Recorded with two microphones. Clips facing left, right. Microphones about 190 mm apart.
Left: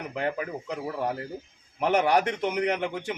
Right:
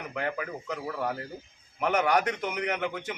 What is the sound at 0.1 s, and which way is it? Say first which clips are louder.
A man's voice: left 3 dB; 30° left (ahead or behind).